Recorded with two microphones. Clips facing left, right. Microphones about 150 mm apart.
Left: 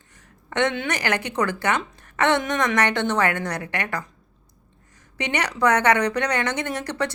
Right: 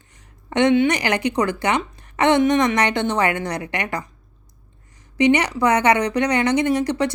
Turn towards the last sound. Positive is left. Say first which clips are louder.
# right 7 dB
turn(degrees=-15)  # may be behind; listen again after turning